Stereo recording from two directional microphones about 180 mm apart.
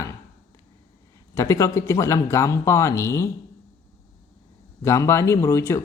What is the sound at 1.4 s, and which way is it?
Speech, 15° left (ahead or behind).